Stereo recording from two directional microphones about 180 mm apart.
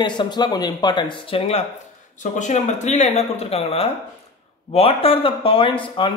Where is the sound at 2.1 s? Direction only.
40° left (ahead or behind).